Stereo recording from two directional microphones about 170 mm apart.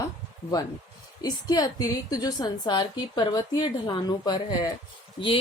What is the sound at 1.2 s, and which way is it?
Speech, 20° left (ahead or behind).